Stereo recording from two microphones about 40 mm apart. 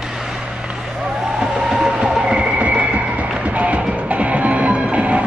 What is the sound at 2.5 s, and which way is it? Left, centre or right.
Music, right.